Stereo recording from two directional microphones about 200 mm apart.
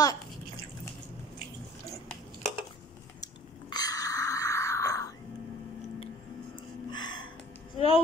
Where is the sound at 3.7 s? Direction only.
20° left (ahead or behind).